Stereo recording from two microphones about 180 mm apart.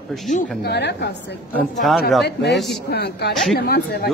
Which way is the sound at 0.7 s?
70° left (ahead or behind).